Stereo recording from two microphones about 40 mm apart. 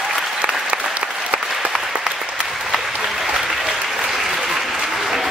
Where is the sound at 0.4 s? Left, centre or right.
Right.